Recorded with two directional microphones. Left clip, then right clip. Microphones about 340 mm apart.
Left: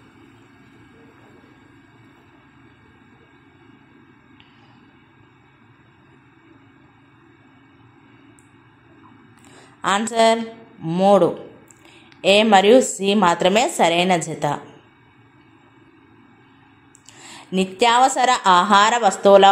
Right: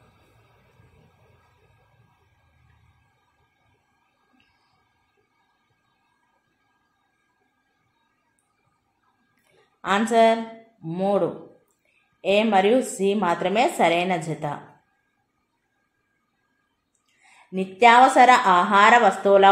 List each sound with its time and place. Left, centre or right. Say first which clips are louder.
9.8 s a woman's voice: left 1 dB; centre
17.5 s a woman's voice: right 1 dB; centre